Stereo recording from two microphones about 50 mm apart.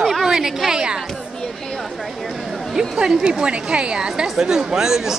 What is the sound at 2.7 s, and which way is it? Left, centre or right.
A woman's voice, centre.